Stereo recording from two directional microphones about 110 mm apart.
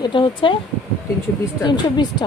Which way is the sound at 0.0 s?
45° left (ahead or behind).